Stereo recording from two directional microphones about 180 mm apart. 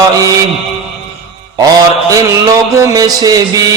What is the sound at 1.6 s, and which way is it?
Mantra, 20° right (ahead or behind).